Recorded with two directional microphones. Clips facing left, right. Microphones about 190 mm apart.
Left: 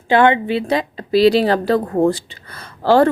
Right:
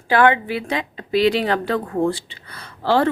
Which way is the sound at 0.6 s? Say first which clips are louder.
Left 6 dB; 35° left (ahead or behind).